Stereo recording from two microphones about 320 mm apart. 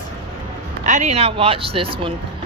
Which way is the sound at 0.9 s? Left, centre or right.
Right.